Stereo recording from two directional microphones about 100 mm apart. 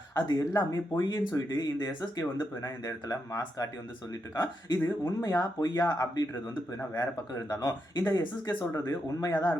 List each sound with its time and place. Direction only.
0.3 s speech: 40° left (ahead or behind)